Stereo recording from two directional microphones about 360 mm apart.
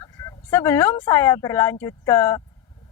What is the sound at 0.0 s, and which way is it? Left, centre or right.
Speech, centre.